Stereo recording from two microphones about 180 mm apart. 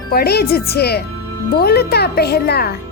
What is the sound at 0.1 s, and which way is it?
A child's voice, 60° left (ahead or behind).